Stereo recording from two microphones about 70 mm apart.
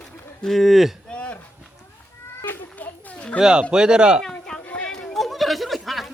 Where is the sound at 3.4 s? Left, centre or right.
Centre.